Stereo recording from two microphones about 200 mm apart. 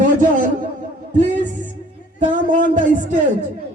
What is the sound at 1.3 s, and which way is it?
Music, 40° right (ahead or behind).